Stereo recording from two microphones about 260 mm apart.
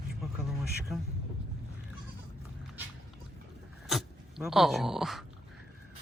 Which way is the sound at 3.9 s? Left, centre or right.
Centre.